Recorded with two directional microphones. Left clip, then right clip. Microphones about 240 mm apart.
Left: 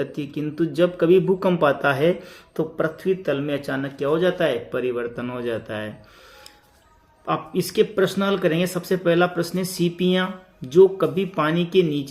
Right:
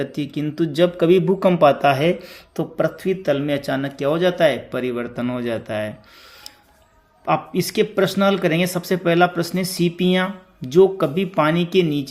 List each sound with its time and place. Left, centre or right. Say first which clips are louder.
0.0 s speech: right 2 dB; right
7.3 s speech: right 4 dB; right